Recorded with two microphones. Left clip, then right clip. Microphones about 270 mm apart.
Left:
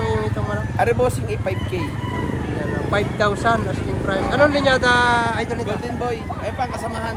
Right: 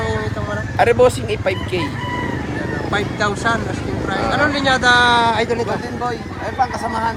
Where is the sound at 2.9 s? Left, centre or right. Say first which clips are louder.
Even; centre.